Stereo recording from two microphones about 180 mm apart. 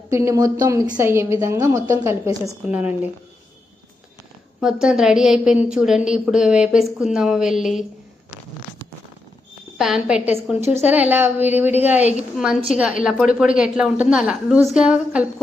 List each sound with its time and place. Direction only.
0.1 s a woman's voice: 15° right (ahead or behind)
4.6 s a woman's voice: 5° right (ahead or behind)
9.7 s a woman's voice: 5° right (ahead or behind)